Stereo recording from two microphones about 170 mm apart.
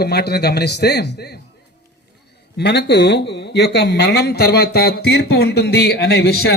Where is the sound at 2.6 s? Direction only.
75° left (ahead or behind).